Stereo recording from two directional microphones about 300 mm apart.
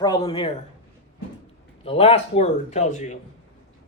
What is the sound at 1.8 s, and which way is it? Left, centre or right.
Speech, centre.